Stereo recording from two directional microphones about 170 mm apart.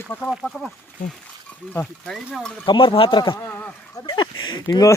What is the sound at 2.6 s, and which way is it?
Speech, 30° left (ahead or behind).